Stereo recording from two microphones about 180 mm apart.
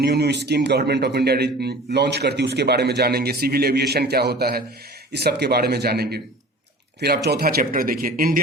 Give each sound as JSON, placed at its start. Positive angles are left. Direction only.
{"t": 0.0, "sound": "a man's voice", "side_deg": -65}
{"t": 7.3, "sound": "speech", "side_deg": -60}